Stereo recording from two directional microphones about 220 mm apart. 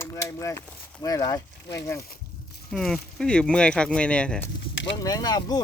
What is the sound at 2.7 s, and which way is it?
Speech, centre (ahead or behind).